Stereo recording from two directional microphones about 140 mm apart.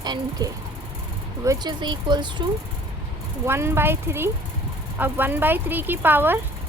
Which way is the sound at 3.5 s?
15° right (ahead or behind).